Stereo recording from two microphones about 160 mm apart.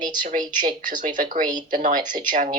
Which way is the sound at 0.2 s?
55° right (ahead or behind).